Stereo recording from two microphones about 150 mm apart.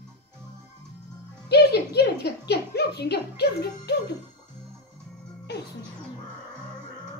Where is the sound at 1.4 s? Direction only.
90° left.